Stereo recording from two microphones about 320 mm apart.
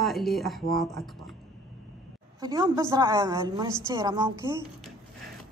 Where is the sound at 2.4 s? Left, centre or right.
Centre.